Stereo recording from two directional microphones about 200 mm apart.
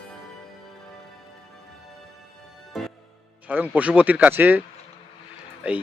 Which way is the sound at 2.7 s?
Centre (ahead or behind).